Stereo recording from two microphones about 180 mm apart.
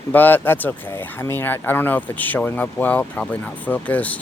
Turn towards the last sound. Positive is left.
turn(degrees=10)  # may be behind; listen again after turning